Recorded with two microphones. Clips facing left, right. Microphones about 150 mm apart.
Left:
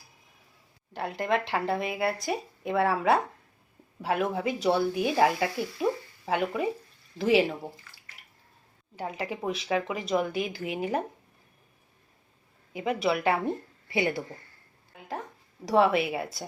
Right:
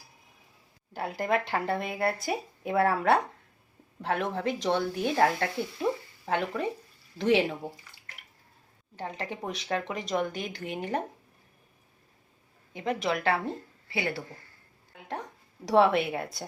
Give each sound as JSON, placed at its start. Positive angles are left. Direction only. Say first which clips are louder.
{"t": 0.9, "sound": "speech", "louder": "even", "side_deg": 0}
{"t": 9.0, "sound": "speech", "louder": "left 2 dB", "side_deg": 10}
{"t": 12.7, "sound": "speech", "louder": "left 2 dB", "side_deg": 5}
{"t": 13.9, "sound": "speech", "louder": "left 4 dB", "side_deg": 20}
{"t": 14.9, "sound": "a woman's voice", "louder": "even", "side_deg": 0}